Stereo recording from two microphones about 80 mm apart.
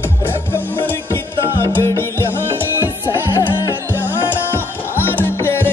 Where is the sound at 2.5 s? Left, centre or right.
Right.